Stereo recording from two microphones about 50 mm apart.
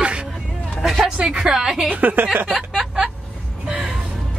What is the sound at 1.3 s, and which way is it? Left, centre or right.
A woman's voice, centre.